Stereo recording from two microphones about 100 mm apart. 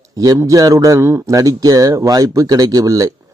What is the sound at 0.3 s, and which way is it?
A man's voice, 35° right (ahead or behind).